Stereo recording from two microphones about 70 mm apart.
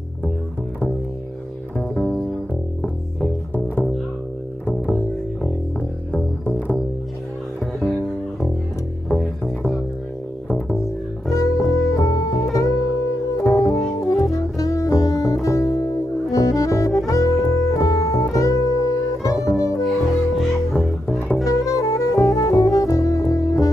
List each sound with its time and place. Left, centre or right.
4.9 s music: centre
11.2 s music: left
19.8 s music: centre
21.5 s music: left